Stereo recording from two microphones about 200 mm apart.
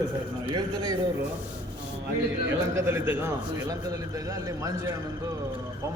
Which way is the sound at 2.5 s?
10° right (ahead or behind).